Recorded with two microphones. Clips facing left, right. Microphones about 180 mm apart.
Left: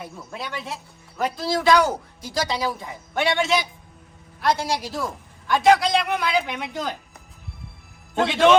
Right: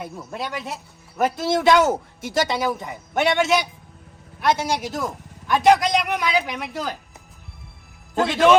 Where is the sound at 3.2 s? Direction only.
Centre (ahead or behind).